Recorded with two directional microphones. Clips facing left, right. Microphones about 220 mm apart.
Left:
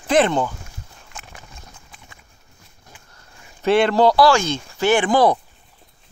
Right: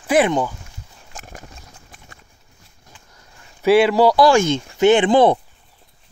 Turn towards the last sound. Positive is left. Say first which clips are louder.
# right 3 dB
turn(degrees=-25)  # may be behind; listen again after turning